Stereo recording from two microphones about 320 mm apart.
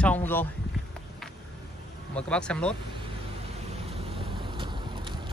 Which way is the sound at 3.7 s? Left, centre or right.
Centre.